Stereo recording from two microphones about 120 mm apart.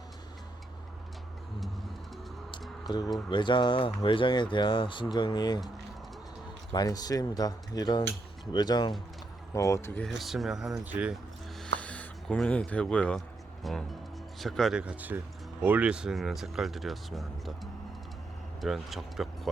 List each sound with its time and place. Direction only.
2.9 s speech: 40° left (ahead or behind)
6.7 s speech: 35° left (ahead or behind)
9.5 s speech: 25° left (ahead or behind)
10.2 s speech: centre (ahead or behind)
10.8 s speech: 15° right (ahead or behind)
11.6 s a sound: 10° left (ahead or behind)
13.7 s speech: centre (ahead or behind)
14.8 s speech: 10° right (ahead or behind)
18.6 s speech: centre (ahead or behind)